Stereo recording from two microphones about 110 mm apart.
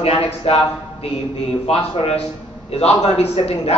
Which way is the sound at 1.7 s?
65° left (ahead or behind).